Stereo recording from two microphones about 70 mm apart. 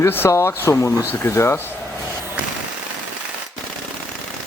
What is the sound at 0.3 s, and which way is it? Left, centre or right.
Speech, left.